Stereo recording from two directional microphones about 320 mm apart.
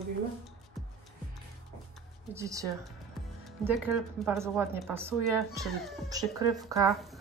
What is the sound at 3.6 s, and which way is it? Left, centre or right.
Speech, centre.